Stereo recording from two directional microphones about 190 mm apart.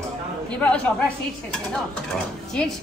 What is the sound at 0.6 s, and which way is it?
Speech, 5° left (ahead or behind).